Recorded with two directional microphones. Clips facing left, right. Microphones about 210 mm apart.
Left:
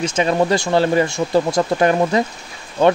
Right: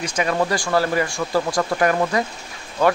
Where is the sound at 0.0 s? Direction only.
25° left (ahead or behind).